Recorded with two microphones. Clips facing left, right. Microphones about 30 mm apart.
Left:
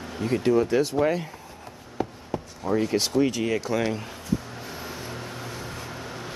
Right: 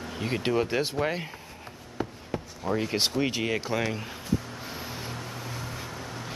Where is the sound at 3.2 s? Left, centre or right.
Right.